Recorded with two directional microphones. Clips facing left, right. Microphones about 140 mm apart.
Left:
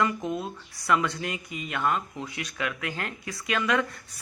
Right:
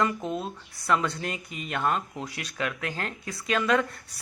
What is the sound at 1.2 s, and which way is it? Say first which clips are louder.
Speech: left 1 dB; 40° right (ahead or behind).